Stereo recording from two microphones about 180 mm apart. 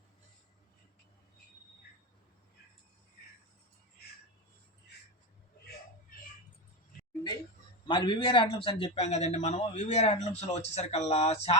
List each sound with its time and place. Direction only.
6.1 s tick: 50° left (ahead or behind)
7.9 s a man's voice: 25° left (ahead or behind)